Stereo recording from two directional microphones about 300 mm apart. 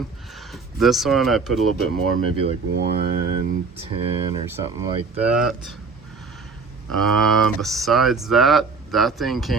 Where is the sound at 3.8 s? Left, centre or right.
Centre.